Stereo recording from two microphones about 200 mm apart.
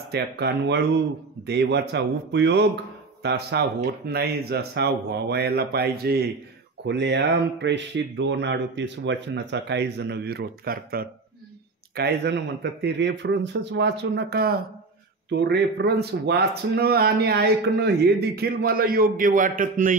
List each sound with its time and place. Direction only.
0.1 s a man's voice: 55° right (ahead or behind)